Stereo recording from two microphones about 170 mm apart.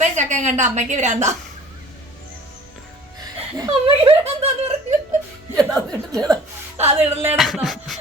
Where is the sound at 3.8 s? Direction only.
35° right (ahead or behind).